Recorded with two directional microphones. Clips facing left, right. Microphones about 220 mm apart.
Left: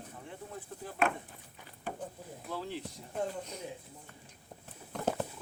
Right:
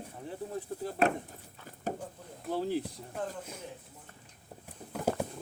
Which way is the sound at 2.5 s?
45° right (ahead or behind).